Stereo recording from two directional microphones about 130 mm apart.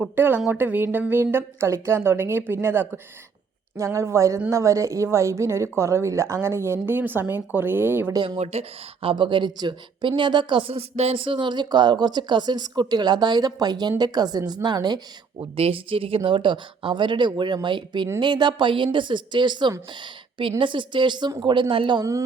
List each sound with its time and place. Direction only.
0.0 s a woman's voice: 15° right (ahead or behind)
8.1 s a woman's voice: 30° right (ahead or behind)
8.4 s a woman's voice: 50° right (ahead or behind); by 15.4 s 30° right (ahead or behind)
15.5 s a woman's voice: 45° right (ahead or behind)